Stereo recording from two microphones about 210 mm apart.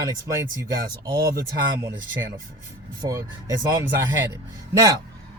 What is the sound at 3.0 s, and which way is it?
Speech, 15° right (ahead or behind).